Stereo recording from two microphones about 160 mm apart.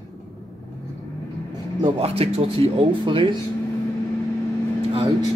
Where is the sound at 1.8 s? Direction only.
40° right (ahead or behind).